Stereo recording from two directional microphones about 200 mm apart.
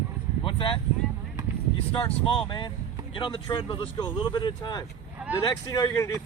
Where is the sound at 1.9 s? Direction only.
30° left (ahead or behind).